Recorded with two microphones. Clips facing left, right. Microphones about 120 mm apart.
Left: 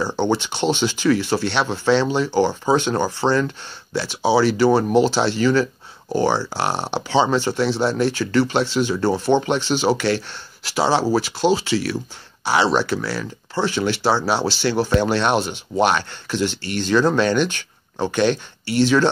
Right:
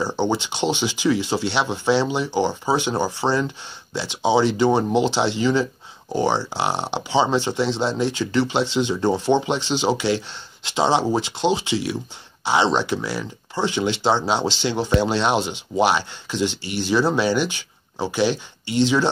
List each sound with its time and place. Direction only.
0.3 s speech: 15° right (ahead or behind)